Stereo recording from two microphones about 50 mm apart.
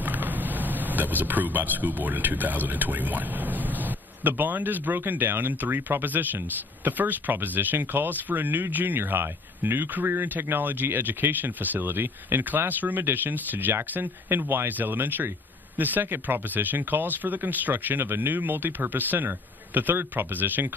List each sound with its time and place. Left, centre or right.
0.0 s speech: right